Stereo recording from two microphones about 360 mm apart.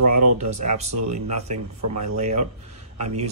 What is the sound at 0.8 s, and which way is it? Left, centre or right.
Speech, right.